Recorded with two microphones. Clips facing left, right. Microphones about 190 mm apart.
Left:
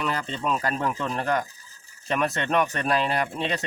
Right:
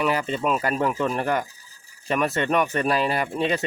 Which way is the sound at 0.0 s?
10° right (ahead or behind).